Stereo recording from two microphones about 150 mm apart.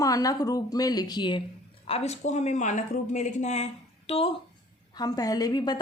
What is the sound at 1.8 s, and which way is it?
Speech, 45° left (ahead or behind).